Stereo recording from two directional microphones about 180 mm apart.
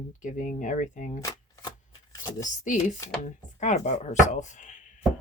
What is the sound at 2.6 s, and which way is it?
Chopping, 45° left (ahead or behind).